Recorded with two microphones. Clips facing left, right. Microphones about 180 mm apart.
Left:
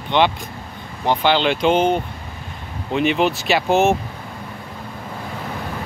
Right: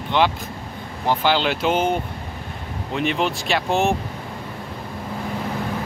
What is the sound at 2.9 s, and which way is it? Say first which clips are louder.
Speech: left 4 dB; 5° left (ahead or behind).